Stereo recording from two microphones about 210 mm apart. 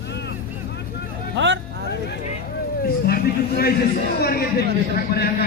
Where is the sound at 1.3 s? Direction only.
60° right (ahead or behind).